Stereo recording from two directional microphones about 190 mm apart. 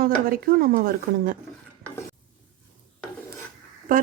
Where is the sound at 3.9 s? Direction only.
45° right (ahead or behind).